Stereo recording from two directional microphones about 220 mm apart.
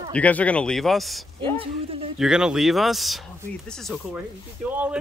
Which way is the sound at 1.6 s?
25° right (ahead or behind).